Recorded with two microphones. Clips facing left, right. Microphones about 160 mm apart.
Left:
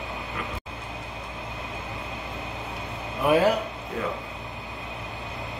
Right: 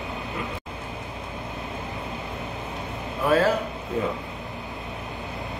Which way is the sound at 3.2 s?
15° left (ahead or behind).